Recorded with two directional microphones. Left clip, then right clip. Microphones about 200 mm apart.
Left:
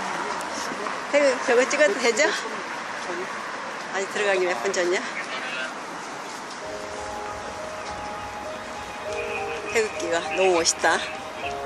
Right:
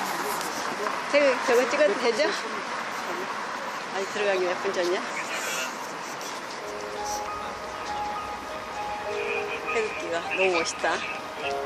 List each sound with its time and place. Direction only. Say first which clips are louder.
1.1 s speech: left 2 dB; 10° left (ahead or behind)
4.2 s speech: left 3 dB; 15° left (ahead or behind)
9.8 s speech: left 7 dB; 35° left (ahead or behind)